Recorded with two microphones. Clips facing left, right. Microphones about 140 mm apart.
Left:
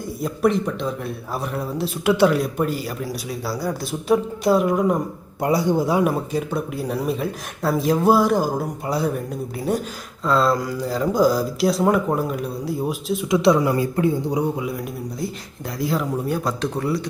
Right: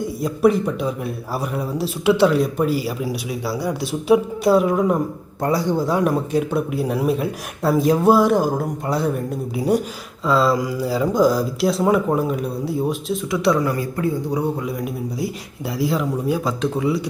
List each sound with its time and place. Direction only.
0.0 s speech: centre (ahead or behind)
5.4 s speech: 15° left (ahead or behind)
13.3 s speech: 20° left (ahead or behind)
15.8 s speech: centre (ahead or behind)